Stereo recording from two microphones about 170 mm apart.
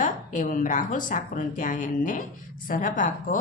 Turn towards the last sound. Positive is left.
turn(degrees=50)  # may be behind; listen again after turning